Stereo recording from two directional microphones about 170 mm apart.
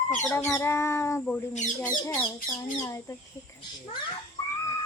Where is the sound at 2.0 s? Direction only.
20° left (ahead or behind).